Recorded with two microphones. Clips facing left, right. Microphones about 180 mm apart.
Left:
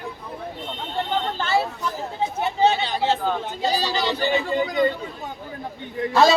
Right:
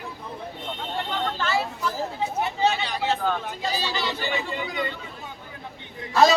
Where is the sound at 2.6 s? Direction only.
25° left (ahead or behind).